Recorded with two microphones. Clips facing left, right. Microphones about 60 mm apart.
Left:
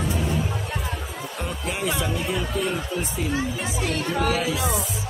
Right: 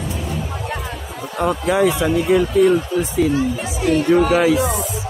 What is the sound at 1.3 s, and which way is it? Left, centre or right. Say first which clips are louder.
Speech: right 14 dB; right.